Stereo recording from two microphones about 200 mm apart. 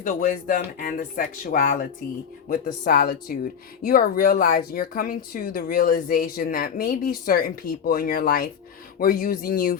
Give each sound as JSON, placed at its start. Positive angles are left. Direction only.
{"t": 0.0, "sound": "speech", "side_deg": 40}